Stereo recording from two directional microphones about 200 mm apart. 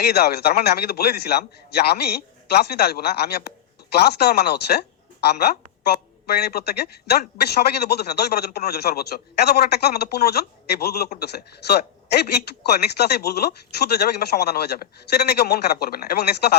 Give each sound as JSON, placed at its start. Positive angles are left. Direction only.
{"t": 0.0, "sound": "a woman's voice", "side_deg": 50}